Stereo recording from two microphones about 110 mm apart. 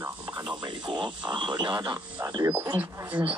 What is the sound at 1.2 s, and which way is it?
Speech, 45° right (ahead or behind).